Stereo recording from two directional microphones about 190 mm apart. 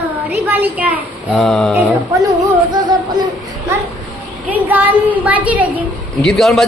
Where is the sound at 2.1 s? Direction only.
15° right (ahead or behind).